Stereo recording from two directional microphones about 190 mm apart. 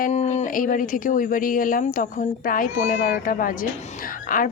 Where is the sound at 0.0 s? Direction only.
40° left (ahead or behind).